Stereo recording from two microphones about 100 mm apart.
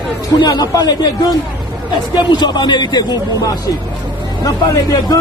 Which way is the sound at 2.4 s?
45° left (ahead or behind).